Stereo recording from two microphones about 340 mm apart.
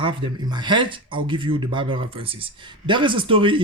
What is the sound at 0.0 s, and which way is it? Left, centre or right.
Speech, centre.